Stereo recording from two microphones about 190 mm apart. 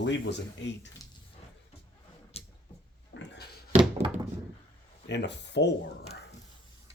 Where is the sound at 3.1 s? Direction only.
65° left (ahead or behind).